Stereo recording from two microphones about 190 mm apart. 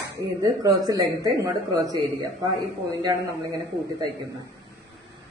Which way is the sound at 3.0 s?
15° right (ahead or behind).